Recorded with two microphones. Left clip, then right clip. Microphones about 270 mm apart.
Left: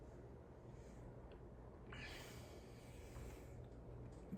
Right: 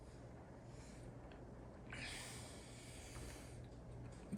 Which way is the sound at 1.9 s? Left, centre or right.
Centre.